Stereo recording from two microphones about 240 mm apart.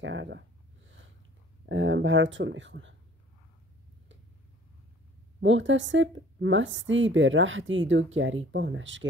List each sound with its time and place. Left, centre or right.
0.0 s a sound: right
0.8 s snort: right
1.7 s speech: right
5.4 s speech: right